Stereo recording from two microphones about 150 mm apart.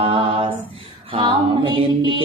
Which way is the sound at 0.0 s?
40° right (ahead or behind).